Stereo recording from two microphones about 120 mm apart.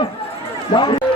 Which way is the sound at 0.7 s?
45° left (ahead or behind).